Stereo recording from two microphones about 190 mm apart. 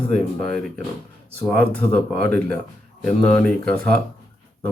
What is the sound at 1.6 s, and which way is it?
Speech, 10° left (ahead or behind).